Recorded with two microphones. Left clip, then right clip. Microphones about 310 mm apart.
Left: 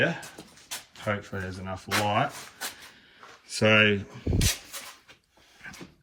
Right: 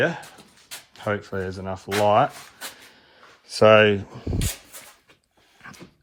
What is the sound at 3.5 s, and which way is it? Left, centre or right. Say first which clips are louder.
Speech: right 7 dB; centre.